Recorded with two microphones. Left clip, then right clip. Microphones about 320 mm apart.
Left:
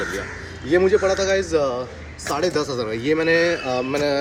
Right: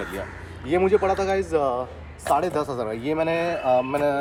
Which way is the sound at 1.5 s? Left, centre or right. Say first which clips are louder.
Left 2 dB; centre.